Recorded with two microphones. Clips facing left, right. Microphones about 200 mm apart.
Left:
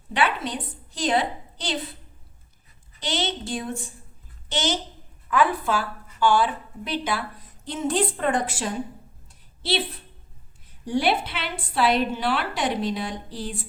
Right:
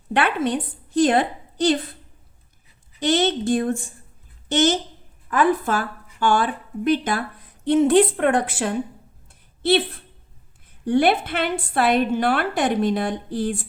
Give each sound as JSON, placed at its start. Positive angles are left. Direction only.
{"t": 0.1, "sound": "a woman's voice", "side_deg": -55}
{"t": 3.0, "sound": "a woman's voice", "side_deg": -50}